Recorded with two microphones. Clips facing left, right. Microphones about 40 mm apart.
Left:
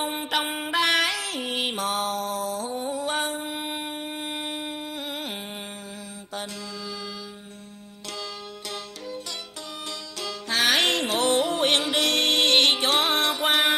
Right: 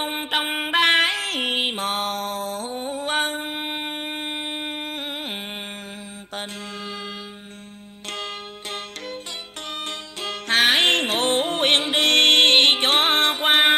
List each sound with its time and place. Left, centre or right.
0.0 s music: right
1.6 s mantra: right
4.3 s a sound: right
4.6 s music: right
5.1 s a sound: right
6.3 s mantra: right
8.1 s music: right